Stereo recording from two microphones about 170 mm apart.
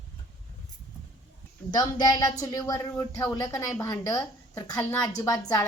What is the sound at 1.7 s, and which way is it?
A woman's voice, 25° left (ahead or behind).